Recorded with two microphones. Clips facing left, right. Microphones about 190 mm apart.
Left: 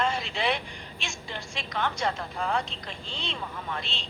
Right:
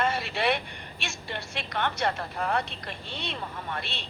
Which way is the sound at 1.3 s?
65° right (ahead or behind).